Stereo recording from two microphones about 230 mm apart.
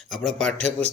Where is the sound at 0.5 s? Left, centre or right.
Right.